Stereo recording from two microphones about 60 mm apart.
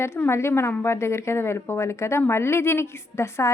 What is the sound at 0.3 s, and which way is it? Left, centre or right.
A woman's voice, left.